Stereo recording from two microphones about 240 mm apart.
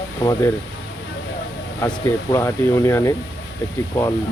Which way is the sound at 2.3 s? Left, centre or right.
Centre.